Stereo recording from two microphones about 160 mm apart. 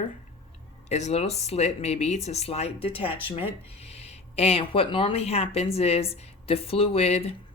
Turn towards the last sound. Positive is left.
turn(degrees=40)  # may be behind; listen again after turning